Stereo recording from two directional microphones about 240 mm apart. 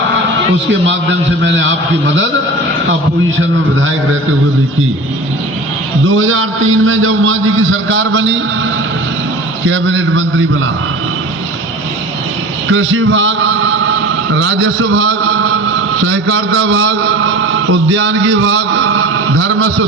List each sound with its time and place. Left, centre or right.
1.5 s a man's voice: right
3.3 s a man's voice: right
6.1 s a man's voice: right
9.6 s a man's voice: right
12.7 s a man's voice: right